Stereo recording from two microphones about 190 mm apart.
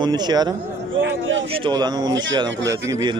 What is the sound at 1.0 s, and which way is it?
Speech, 75° right (ahead or behind).